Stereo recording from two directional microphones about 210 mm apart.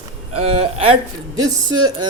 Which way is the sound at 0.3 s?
25° right (ahead or behind).